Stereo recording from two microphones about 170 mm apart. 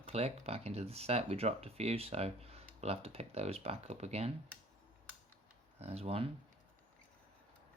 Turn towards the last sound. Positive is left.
turn(degrees=-35)  # may be behind; listen again after turning